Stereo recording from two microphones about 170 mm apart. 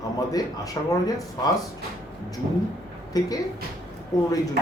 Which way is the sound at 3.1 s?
20° left (ahead or behind).